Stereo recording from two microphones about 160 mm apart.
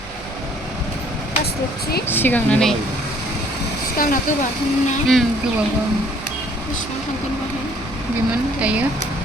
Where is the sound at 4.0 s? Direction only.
60° left (ahead or behind).